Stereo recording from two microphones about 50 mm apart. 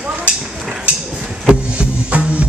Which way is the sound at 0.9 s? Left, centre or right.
Right.